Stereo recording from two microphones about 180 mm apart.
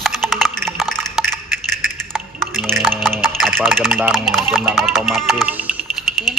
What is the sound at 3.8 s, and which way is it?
Speech, centre (ahead or behind).